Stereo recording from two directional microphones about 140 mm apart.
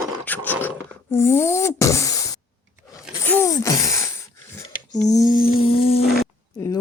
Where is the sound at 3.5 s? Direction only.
25° left (ahead or behind).